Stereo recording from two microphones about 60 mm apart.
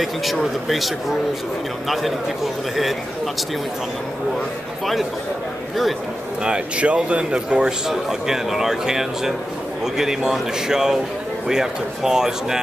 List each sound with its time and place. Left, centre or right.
0.0 s a man's voice: centre
6.4 s speech: centre